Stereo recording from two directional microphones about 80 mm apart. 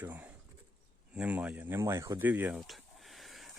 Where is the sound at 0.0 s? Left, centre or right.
Right.